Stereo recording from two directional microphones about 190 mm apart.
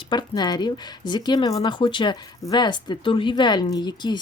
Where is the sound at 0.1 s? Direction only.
20° left (ahead or behind).